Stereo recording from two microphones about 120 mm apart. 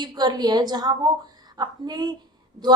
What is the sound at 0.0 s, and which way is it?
A woman's voice, 35° right (ahead or behind).